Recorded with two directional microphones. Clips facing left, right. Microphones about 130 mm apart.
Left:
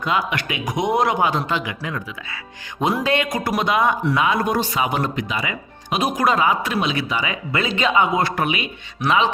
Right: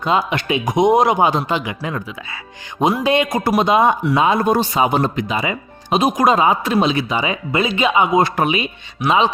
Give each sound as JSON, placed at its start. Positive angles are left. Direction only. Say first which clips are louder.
{"t": 0.0, "sound": "speech", "louder": "right 4 dB", "side_deg": -25}
{"t": 3.0, "sound": "speech", "louder": "right 4 dB", "side_deg": -20}